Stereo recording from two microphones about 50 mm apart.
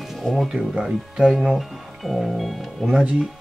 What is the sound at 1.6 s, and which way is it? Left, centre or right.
Speech, centre.